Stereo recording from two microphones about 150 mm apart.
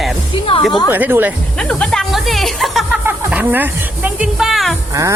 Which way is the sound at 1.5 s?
5° left (ahead or behind).